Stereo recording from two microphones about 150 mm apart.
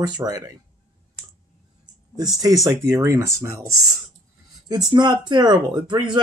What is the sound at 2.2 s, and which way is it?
Speech, 25° right (ahead or behind).